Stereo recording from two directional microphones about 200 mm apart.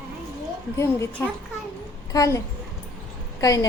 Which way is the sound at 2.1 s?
15° left (ahead or behind).